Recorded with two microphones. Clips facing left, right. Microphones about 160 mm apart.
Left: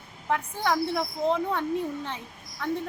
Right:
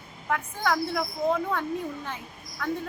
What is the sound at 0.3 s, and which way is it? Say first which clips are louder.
A woman's voice: left 1 dB; 20° left (ahead or behind).